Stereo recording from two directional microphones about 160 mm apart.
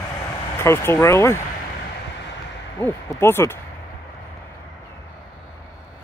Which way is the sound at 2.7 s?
15° left (ahead or behind).